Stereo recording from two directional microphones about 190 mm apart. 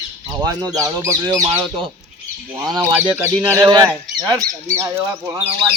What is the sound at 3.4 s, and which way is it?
Speech, 15° right (ahead or behind).